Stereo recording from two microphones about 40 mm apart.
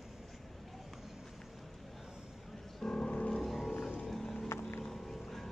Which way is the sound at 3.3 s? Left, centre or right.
Centre.